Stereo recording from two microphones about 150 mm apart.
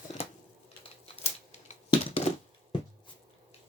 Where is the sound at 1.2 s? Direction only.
45° left (ahead or behind).